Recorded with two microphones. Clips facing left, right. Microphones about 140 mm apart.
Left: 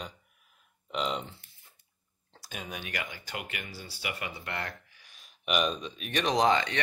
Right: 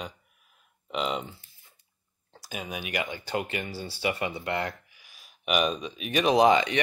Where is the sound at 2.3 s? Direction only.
5° right (ahead or behind); by 4.7 s 20° right (ahead or behind).